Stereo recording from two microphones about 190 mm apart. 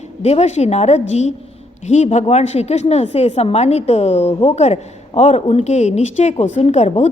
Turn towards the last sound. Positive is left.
turn(degrees=35)  # may be behind; listen again after turning